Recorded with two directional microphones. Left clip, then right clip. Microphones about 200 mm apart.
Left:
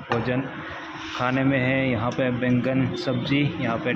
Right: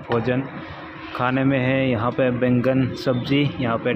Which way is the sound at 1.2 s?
10° right (ahead or behind).